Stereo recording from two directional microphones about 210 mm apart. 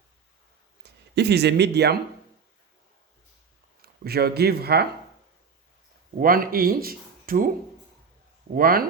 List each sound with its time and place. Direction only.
0.8 s speech: 50° right (ahead or behind)
3.8 s speech: 50° right (ahead or behind)
6.1 s speech: 45° right (ahead or behind)
8.5 s speech: 45° right (ahead or behind)